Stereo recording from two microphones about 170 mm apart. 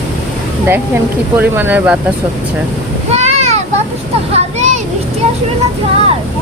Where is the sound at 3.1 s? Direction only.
40° right (ahead or behind).